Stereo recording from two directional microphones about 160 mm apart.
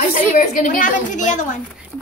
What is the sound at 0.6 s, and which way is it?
Speech, 55° left (ahead or behind).